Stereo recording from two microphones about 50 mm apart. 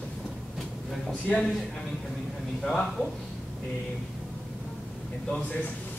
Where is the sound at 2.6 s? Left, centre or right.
Centre.